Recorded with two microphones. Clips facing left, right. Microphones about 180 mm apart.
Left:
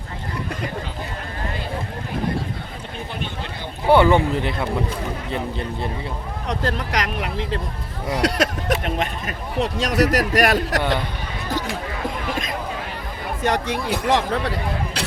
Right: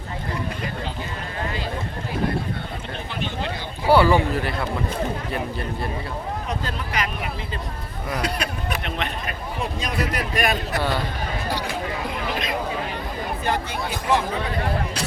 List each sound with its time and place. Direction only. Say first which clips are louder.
3.8 s speech: left 2 dB; 20° left (ahead or behind)
6.5 s speech: left 9 dB; 80° left
8.2 s speech: left 8 dB; 90° left
8.8 s speech: left 4 dB; 45° left (ahead or behind)
9.6 s speech: left 8 dB; 85° left
13.4 s speech: left 6 dB; 80° left